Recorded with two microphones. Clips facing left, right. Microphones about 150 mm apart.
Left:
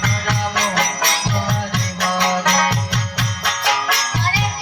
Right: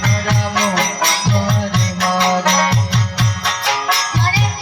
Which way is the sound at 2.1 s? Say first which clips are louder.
Right 3 dB; 60° right (ahead or behind).